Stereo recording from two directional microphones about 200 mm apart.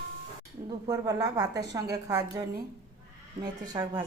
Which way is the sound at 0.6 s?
20° right (ahead or behind).